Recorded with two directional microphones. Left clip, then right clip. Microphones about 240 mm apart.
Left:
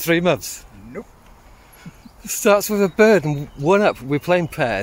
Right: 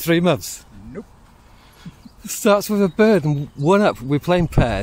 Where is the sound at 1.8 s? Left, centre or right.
Centre.